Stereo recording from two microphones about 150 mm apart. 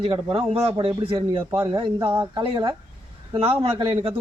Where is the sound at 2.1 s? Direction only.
20° right (ahead or behind).